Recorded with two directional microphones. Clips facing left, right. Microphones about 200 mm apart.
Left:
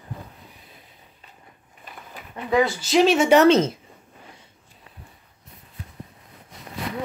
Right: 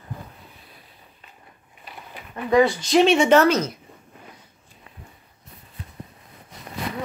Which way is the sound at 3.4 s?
25° left (ahead or behind).